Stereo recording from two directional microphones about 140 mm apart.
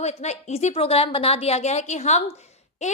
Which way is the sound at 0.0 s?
50° left (ahead or behind).